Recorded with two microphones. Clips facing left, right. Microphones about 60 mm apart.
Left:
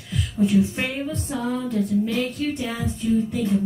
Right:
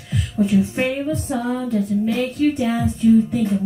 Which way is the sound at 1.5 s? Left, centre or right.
Right.